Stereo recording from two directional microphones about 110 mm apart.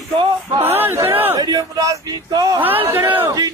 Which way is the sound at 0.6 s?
20° right (ahead or behind).